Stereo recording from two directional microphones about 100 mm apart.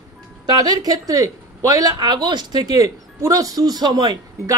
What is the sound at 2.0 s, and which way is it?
Speech, 45° right (ahead or behind).